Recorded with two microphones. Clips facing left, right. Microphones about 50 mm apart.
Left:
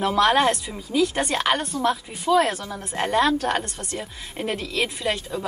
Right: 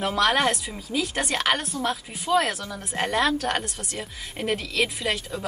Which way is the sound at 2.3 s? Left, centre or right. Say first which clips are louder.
Left 3 dB; centre.